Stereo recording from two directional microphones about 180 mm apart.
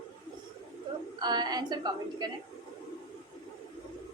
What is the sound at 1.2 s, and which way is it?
A woman's voice, 25° right (ahead or behind).